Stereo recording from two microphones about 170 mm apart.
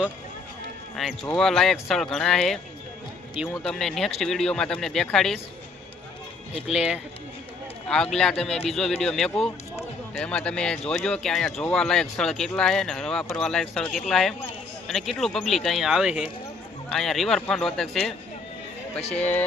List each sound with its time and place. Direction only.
0.9 s speech: centre (ahead or behind)
6.7 s speech: 5° right (ahead or behind)
8.5 s speech: 35° left (ahead or behind)
9.0 s speech: centre (ahead or behind)
19.1 s speech: 10° left (ahead or behind)